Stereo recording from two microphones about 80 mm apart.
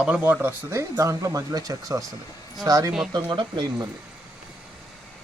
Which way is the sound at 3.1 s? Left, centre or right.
Right.